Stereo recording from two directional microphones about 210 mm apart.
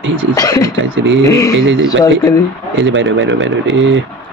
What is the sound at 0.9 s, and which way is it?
Speech, 60° right (ahead or behind).